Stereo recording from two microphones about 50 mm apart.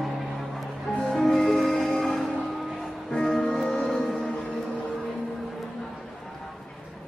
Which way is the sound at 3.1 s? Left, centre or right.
Centre.